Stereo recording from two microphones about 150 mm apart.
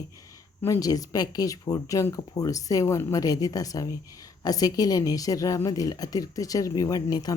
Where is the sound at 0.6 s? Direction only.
20° left (ahead or behind).